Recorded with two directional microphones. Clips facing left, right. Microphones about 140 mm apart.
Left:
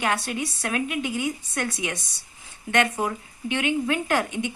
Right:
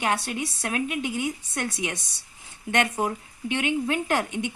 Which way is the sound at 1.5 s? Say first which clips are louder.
Even; 30° right (ahead or behind).